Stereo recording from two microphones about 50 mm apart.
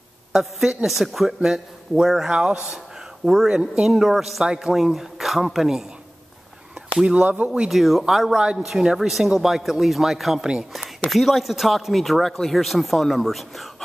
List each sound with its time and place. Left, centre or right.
0.3 s speech: centre
3.9 s speech: centre
7.2 s speech: right
7.7 s speech: centre
8.4 s speech: centre